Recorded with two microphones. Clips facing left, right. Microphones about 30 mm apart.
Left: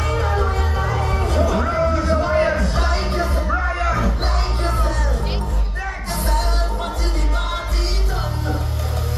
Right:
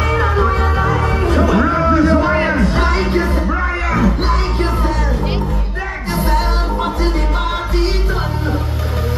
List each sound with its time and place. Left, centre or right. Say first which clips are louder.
0.0 s music: right 6 dB; right